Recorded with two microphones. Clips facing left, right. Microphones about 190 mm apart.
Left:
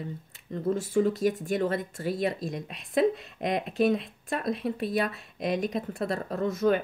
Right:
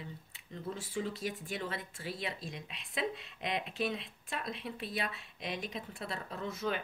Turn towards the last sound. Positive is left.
turn(degrees=45)  # may be behind; listen again after turning